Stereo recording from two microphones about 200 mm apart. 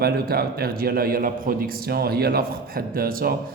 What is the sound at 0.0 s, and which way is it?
Speech, 50° right (ahead or behind).